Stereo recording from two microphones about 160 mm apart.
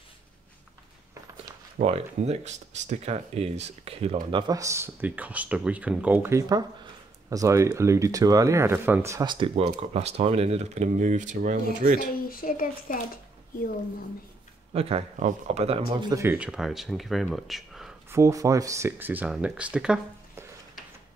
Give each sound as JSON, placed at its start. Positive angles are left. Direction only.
{"t": 1.8, "sound": "speech", "side_deg": -40}
{"t": 9.7, "sound": "speech", "side_deg": -45}
{"t": 12.0, "sound": "speech", "side_deg": 65}
{"t": 14.7, "sound": "speech", "side_deg": -40}
{"t": 16.2, "sound": "speech", "side_deg": -10}
{"t": 18.1, "sound": "speech", "side_deg": -20}